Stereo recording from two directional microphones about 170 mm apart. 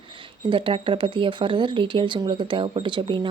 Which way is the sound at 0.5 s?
30° right (ahead or behind).